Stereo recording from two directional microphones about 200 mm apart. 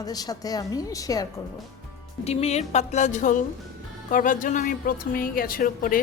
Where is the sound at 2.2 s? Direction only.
30° left (ahead or behind).